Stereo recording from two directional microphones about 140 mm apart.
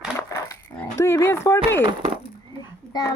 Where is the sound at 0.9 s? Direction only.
20° left (ahead or behind).